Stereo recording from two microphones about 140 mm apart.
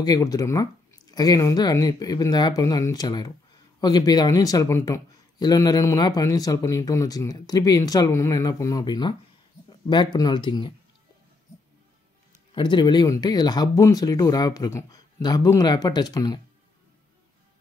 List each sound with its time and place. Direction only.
0.0 s speech: 25° left (ahead or behind)
12.5 s speech: 35° left (ahead or behind)